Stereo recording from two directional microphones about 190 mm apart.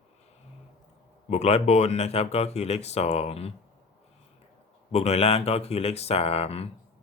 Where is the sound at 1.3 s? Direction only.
35° left (ahead or behind).